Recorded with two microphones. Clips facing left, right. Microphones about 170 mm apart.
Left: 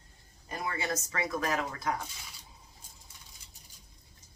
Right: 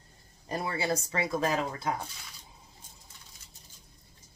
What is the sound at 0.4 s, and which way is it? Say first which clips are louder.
Speech: right 4 dB; 30° right (ahead or behind).